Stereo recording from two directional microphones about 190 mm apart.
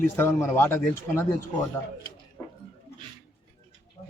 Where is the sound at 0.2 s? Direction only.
15° left (ahead or behind).